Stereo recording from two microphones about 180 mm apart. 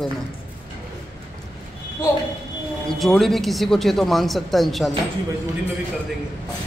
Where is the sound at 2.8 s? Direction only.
Centre (ahead or behind).